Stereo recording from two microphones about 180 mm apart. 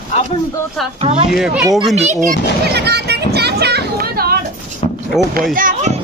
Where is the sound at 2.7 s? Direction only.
65° right (ahead or behind).